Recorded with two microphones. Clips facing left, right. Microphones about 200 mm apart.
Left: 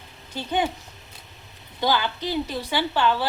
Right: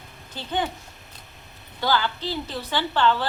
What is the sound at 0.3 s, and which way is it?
Speech, 10° left (ahead or behind).